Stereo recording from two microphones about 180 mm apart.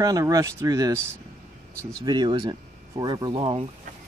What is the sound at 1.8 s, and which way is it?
Speech, 5° left (ahead or behind).